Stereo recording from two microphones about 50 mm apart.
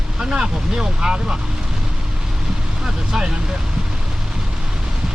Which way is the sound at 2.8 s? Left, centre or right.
Centre.